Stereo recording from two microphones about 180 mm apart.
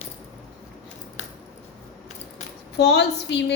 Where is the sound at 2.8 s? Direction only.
70° left (ahead or behind).